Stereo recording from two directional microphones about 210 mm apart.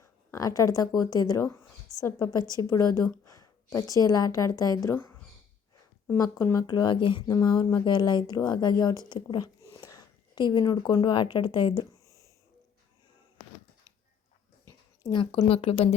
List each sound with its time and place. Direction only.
0.0 s a woman's voice: 15° left (ahead or behind)
15.0 s speech: 20° left (ahead or behind)